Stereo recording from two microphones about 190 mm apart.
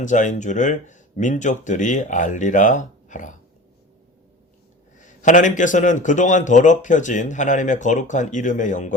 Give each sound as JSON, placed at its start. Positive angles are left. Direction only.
{"t": 0.0, "sound": "a man's voice", "side_deg": 40}
{"t": 5.0, "sound": "a man's voice", "side_deg": 40}